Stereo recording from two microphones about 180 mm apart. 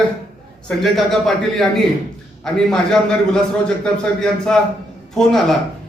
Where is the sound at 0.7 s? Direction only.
Centre (ahead or behind).